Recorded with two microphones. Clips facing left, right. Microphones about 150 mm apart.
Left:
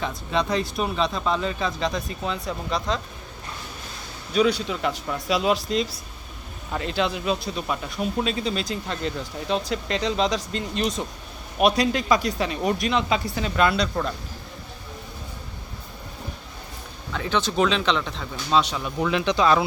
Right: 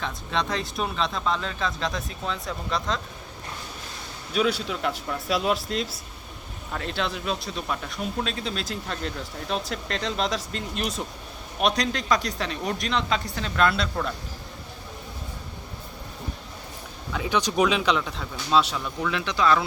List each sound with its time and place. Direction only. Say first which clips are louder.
0.0 s speech: left 3 dB; 5° left (ahead or behind)
4.4 s speech: left 3 dB; centre (ahead or behind)
17.1 s speech: even; 10° right (ahead or behind)
18.9 s speech: left 5 dB; 20° left (ahead or behind)